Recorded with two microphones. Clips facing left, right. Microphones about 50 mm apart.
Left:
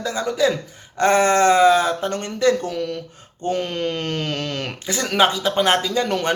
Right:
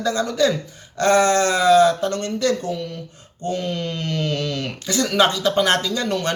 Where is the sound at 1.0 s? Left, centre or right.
Left.